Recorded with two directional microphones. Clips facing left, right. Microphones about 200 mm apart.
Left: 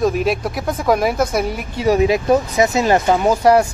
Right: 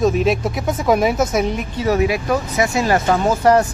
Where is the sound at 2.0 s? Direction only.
25° left (ahead or behind).